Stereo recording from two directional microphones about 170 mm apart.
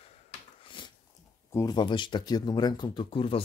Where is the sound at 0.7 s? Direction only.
30° left (ahead or behind).